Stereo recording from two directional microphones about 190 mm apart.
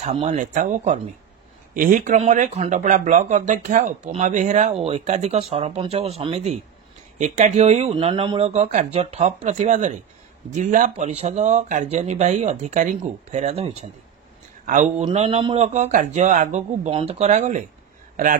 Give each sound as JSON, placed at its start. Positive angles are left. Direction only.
{"t": 0.0, "sound": "speech", "side_deg": -35}